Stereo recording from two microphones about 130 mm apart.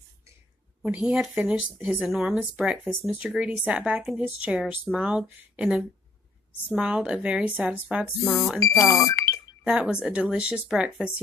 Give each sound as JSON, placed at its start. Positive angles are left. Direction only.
{"t": 0.8, "sound": "speech", "side_deg": -5}
{"t": 8.2, "sound": "speech", "side_deg": 0}
{"t": 8.5, "sound": "speech", "side_deg": 25}
{"t": 9.7, "sound": "speech", "side_deg": -5}